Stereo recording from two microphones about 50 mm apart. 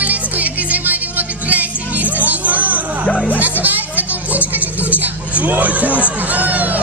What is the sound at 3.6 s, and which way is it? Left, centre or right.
Music, right.